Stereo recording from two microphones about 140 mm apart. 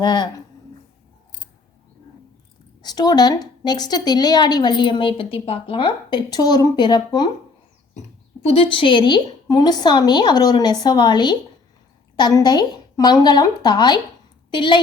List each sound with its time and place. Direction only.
0.0 s a woman's voice: 30° left (ahead or behind)
2.8 s a woman's voice: 30° left (ahead or behind)
8.4 s a woman's voice: 40° left (ahead or behind)